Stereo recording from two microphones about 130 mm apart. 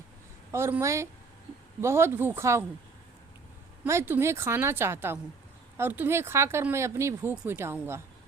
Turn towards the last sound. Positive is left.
turn(degrees=-20)  # may be behind; listen again after turning